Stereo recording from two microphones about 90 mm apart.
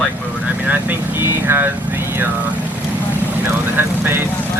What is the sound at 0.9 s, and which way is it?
Vehicle, 25° right (ahead or behind).